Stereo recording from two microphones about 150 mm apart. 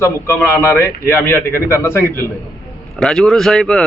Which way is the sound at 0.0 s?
15° left (ahead or behind).